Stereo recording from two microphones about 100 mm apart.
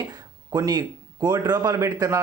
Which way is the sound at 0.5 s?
40° right (ahead or behind).